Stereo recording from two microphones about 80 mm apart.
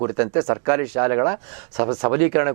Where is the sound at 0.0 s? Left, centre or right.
Right.